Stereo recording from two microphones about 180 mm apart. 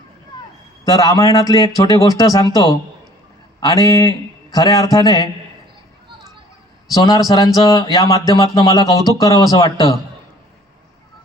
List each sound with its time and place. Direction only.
0.3 s vehicle: 25° left (ahead or behind)
0.9 s speech: 20° left (ahead or behind)
6.9 s speech: 20° left (ahead or behind)